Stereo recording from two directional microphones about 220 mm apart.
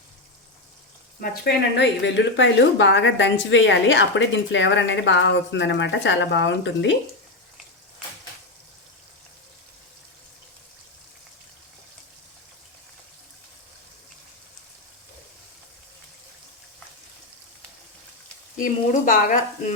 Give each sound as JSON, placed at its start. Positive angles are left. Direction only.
{"t": 1.7, "sound": "a woman's voice", "side_deg": 55}
{"t": 18.5, "sound": "speech", "side_deg": 40}